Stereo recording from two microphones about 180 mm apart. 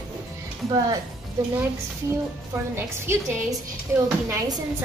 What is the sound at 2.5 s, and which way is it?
Speech, 15° right (ahead or behind).